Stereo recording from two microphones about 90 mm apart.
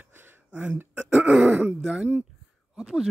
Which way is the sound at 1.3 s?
15° right (ahead or behind).